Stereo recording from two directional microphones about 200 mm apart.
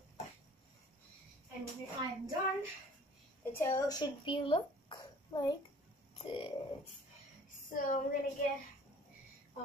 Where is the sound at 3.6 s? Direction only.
15° left (ahead or behind).